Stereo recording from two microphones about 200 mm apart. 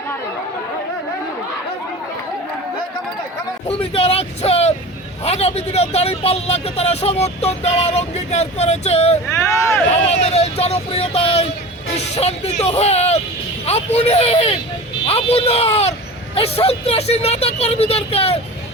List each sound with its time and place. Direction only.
3.7 s speech: 30° left (ahead or behind)
9.5 s speech: 15° left (ahead or behind)
9.9 s speech: 30° left (ahead or behind)